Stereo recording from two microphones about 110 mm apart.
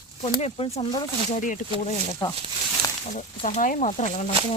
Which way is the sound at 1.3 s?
90° left.